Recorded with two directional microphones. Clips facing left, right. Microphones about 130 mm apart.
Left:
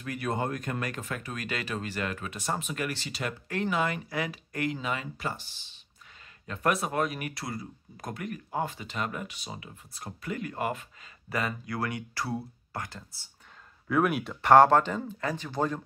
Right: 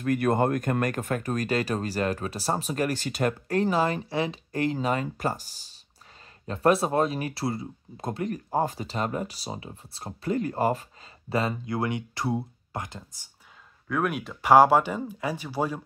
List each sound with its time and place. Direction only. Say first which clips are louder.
0.0 s speech: right 8 dB; 50° right (ahead or behind); by 13.2 s 20° right (ahead or behind)
13.8 s speech: left 2 dB; centre (ahead or behind)